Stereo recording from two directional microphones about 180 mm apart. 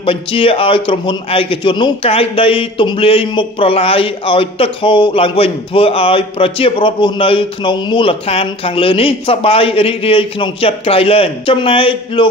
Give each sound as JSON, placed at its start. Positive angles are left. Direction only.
{"t": 0.0, "sound": "a man's voice", "side_deg": 30}